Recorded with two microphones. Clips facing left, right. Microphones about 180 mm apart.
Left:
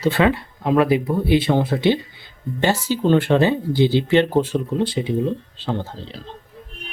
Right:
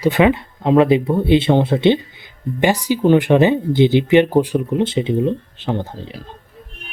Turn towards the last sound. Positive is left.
turn(degrees=-15)  # may be behind; listen again after turning